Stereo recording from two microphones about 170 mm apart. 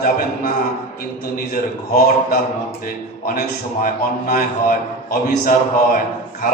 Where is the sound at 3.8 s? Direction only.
60° left (ahead or behind).